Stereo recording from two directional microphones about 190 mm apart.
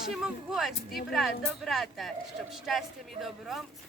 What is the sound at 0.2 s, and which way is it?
Speech, centre (ahead or behind).